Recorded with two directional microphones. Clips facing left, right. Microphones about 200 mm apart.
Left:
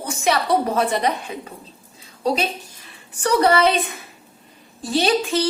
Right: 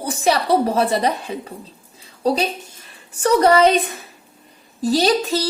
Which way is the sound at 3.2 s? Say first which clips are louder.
Right 3 dB; 40° right (ahead or behind).